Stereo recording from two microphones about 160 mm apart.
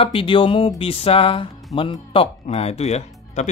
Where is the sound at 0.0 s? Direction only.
35° left (ahead or behind).